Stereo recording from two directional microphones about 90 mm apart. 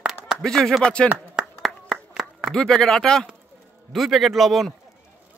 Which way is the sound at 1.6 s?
Centre (ahead or behind).